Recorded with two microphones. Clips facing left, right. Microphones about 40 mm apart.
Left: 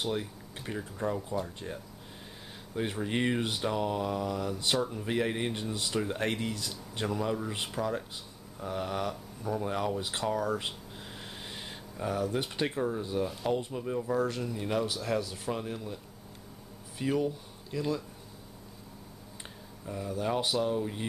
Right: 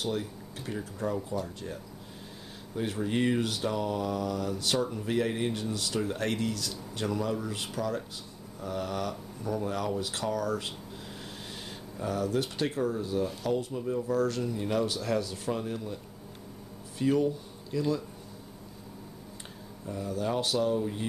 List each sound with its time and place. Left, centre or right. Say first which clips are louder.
0.0 s speech: right 1 dB; centre
4.7 s speech: right 3 dB; centre
5.0 s speech: right 1 dB; centre
12.0 s speech: right 1 dB; centre
14.4 s speech: right 2 dB; centre
17.0 s speech: right 4 dB; centre
19.9 s speech: right 1 dB; centre